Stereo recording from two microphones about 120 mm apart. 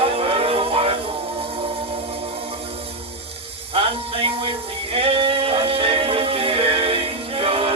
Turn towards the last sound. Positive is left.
turn(degrees=-50)  # may be behind; listen again after turning